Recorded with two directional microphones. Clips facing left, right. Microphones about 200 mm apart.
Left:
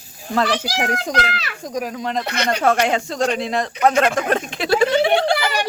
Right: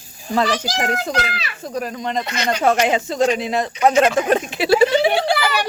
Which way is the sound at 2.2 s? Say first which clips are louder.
Left 1 dB; 60° left (ahead or behind).